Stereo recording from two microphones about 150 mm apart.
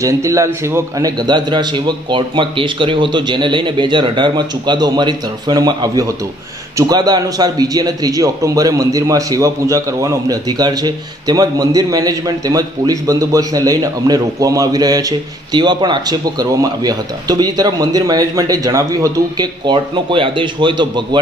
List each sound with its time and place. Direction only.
0.0 s a man's voice: 20° right (ahead or behind)